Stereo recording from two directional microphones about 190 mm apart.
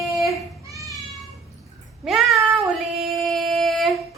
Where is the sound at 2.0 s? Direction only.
Centre (ahead or behind).